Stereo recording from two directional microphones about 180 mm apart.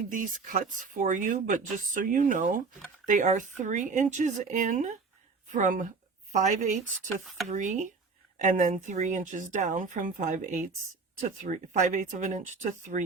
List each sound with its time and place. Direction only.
0.1 s speech: 50° right (ahead or behind)